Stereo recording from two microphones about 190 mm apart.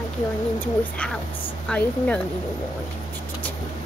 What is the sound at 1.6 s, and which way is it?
Speech, 5° left (ahead or behind).